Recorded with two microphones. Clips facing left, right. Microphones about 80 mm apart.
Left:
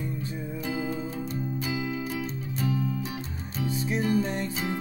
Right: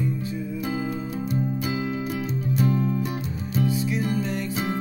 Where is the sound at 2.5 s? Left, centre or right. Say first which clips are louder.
Right 5 dB; right.